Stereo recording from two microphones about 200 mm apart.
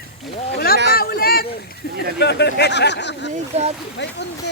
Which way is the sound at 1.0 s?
50° left (ahead or behind).